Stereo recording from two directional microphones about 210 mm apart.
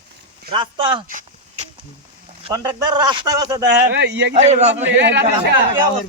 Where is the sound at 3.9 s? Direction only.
55° right (ahead or behind).